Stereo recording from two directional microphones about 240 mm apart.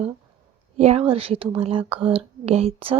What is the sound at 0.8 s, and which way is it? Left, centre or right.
Speech, right.